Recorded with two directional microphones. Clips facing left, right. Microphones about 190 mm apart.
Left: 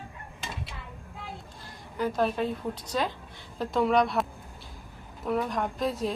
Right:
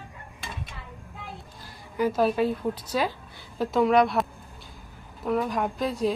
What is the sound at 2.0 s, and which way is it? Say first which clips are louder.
A woman's voice: right 4 dB; 5° right (ahead or behind).